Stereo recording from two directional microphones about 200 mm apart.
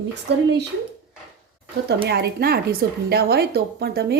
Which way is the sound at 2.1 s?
50° right (ahead or behind).